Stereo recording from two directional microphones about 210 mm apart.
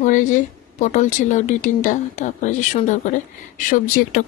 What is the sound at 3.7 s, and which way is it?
Speech, 40° left (ahead or behind).